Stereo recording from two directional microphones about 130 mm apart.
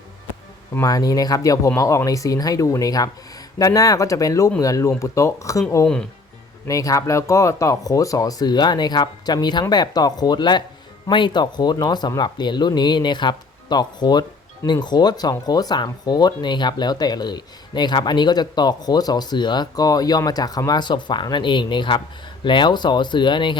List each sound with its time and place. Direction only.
0.7 s speech: 25° left (ahead or behind)
6.7 s speech: 25° left (ahead or behind)